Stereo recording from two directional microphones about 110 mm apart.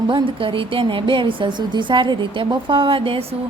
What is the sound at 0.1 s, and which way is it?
A woman's voice, 50° right (ahead or behind).